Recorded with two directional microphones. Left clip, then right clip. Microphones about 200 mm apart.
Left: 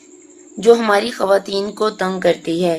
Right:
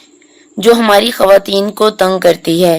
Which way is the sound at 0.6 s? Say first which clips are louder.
Right 5 dB; 45° right (ahead or behind).